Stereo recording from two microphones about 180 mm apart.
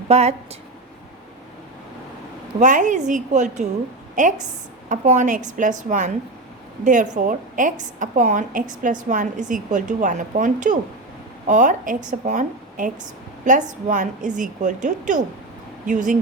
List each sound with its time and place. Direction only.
0.1 s a woman's voice: 35° right (ahead or behind)
2.6 s a woman's voice: 45° right (ahead or behind)